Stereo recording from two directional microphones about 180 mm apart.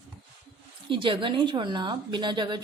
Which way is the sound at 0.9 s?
25° right (ahead or behind).